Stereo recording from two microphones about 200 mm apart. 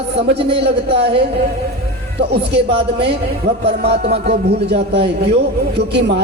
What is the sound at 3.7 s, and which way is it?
A man's voice, 55° right (ahead or behind).